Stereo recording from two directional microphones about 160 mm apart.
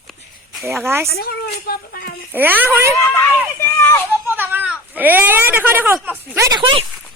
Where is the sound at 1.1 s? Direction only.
75° left (ahead or behind).